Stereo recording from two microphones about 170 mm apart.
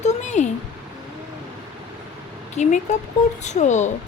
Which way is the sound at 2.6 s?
45° left (ahead or behind).